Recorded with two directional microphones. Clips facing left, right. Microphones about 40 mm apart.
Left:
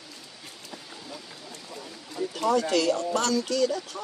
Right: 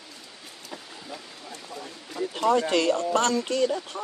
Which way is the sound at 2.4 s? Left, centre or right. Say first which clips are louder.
Right 2 dB; right.